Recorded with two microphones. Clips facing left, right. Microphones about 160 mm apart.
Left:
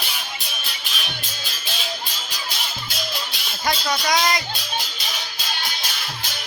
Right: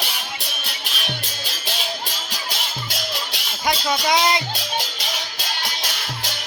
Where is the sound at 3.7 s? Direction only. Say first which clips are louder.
Right 2 dB; 25° right (ahead or behind).